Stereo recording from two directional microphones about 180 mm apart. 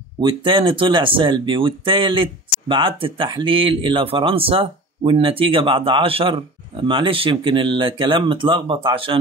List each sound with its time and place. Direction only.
0.2 s speech: 25° right (ahead or behind)